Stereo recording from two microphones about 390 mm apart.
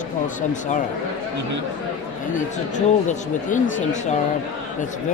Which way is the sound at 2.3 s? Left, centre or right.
Centre.